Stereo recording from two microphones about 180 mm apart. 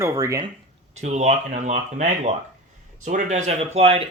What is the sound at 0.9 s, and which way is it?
Speech, 40° right (ahead or behind).